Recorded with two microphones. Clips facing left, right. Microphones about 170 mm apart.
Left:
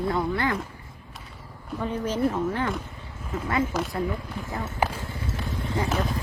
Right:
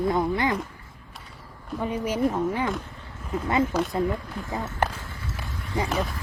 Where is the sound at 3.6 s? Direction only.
5° left (ahead or behind).